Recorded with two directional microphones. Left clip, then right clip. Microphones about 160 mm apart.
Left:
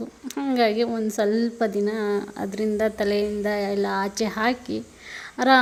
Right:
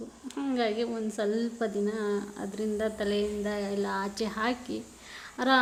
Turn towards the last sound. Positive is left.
turn(degrees=30)  # may be behind; listen again after turning